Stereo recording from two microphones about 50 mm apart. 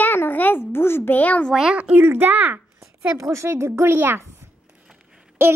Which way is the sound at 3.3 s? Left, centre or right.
Right.